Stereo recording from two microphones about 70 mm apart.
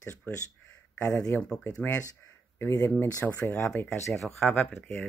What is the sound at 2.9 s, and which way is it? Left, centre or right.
Speech, left.